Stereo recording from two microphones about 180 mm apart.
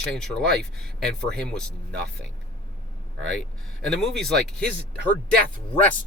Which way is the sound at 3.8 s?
5° left (ahead or behind).